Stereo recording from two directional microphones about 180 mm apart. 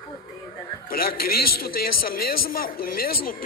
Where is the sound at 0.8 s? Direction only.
55° left (ahead or behind).